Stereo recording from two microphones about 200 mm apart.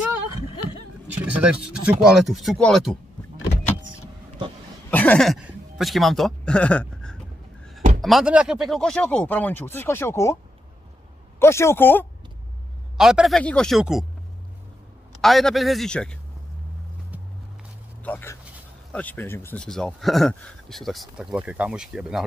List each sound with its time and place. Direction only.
1.0 s speech: 5° right (ahead or behind)
4.9 s speech: 5° left (ahead or behind)
11.3 s speech: 15° left (ahead or behind)
12.9 s speech: 5° right (ahead or behind)
15.1 s speech: centre (ahead or behind)
18.0 s speech: 10° left (ahead or behind)